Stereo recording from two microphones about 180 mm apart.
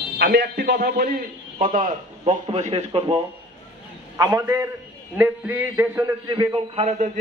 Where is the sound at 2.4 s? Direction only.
35° right (ahead or behind).